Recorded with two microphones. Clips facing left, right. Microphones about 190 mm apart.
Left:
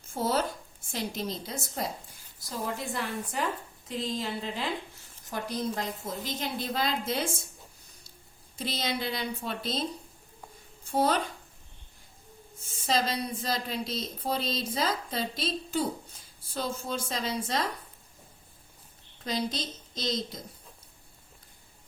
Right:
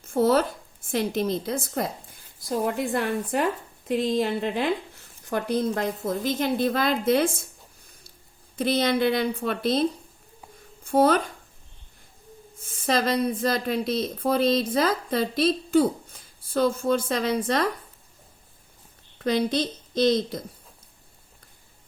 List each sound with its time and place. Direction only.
0.1 s speech: 55° right (ahead or behind)
8.5 s speech: 60° right (ahead or behind)
10.8 s speech: 55° right (ahead or behind)
12.6 s speech: 55° right (ahead or behind)
19.2 s speech: 60° right (ahead or behind)